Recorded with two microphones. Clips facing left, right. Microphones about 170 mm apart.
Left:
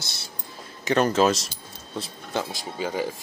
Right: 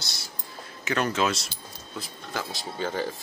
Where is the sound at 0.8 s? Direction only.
35° left (ahead or behind).